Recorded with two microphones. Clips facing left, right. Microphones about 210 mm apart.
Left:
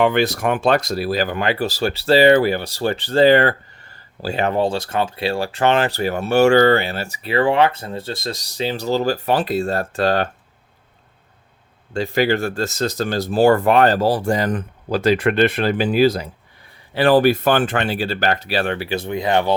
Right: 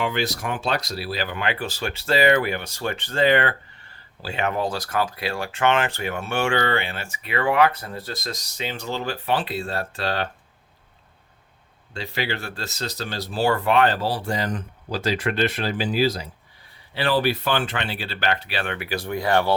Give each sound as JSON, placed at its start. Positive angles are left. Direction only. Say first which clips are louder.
{"t": 0.0, "sound": "speech", "louder": "left 8 dB", "side_deg": 55}
{"t": 11.9, "sound": "speech", "louder": "left 10 dB", "side_deg": 45}